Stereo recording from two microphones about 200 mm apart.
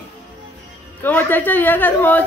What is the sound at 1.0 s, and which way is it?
A woman's voice, 10° left (ahead or behind).